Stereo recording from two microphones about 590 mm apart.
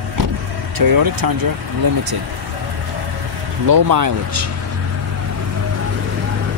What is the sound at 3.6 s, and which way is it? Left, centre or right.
Speech, right.